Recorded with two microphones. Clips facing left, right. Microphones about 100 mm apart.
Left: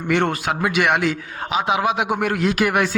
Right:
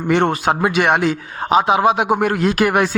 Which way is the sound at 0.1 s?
30° right (ahead or behind).